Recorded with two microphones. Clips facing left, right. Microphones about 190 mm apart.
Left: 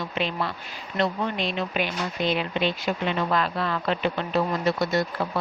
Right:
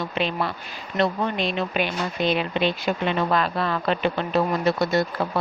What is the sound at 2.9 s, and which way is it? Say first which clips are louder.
Speech: right 3 dB; 50° right (ahead or behind).